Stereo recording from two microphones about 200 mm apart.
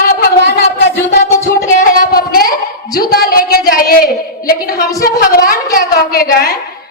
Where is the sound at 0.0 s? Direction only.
50° left (ahead or behind).